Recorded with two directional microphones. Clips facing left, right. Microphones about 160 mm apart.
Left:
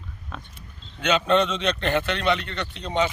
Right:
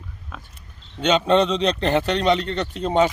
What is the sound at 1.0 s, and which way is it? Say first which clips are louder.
A man's voice: right 3 dB; 30° right (ahead or behind).